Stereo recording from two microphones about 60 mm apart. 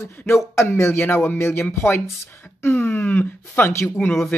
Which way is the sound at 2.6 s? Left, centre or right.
Left.